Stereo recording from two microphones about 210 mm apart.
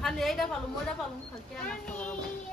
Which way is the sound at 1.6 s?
5° left (ahead or behind).